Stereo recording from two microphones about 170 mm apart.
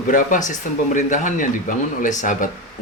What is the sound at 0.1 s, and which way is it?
Speech, 50° left (ahead or behind).